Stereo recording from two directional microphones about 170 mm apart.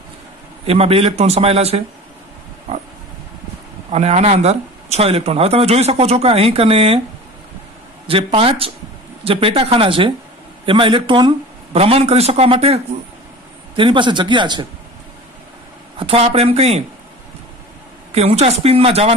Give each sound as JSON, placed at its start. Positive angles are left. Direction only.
{"t": 0.7, "sound": "speech", "side_deg": -35}
{"t": 2.7, "sound": "pig", "side_deg": -40}
{"t": 3.9, "sound": "speech", "side_deg": -40}
{"t": 8.1, "sound": "speech", "side_deg": -30}
{"t": 16.0, "sound": "speech", "side_deg": -35}
{"t": 18.1, "sound": "speech", "side_deg": -40}